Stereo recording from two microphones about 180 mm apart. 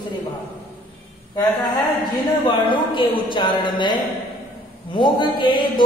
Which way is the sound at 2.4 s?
25° left (ahead or behind).